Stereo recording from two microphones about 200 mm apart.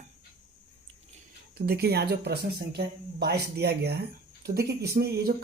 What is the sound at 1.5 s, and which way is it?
Speech, 50° right (ahead or behind).